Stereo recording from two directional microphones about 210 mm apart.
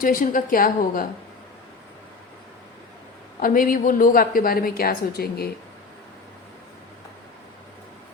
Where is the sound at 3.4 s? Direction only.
40° left (ahead or behind).